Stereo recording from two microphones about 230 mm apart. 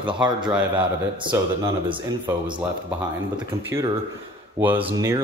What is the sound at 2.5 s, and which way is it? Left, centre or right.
Speech, centre.